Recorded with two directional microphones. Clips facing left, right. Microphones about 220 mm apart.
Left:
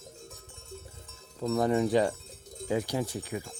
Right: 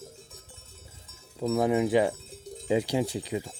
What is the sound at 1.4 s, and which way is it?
Speech, 5° right (ahead or behind).